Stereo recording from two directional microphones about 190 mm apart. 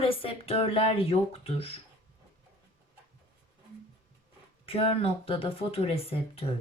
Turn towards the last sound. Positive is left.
turn(degrees=30)  # may be behind; listen again after turning